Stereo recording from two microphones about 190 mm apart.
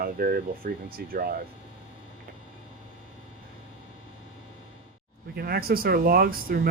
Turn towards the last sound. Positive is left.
turn(degrees=-50)  # may be behind; listen again after turning